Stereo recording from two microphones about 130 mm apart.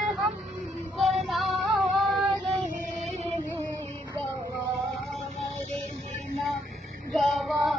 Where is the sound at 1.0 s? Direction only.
Centre (ahead or behind).